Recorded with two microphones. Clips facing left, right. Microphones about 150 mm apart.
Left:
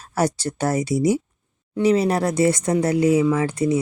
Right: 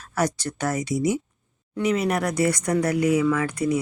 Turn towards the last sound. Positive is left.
turn(degrees=25)  # may be behind; listen again after turning